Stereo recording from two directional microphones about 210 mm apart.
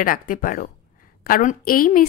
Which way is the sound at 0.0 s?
40° left (ahead or behind).